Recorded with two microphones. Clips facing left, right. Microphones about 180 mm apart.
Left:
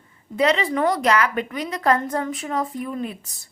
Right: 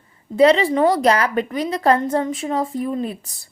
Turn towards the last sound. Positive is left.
turn(degrees=-30)  # may be behind; listen again after turning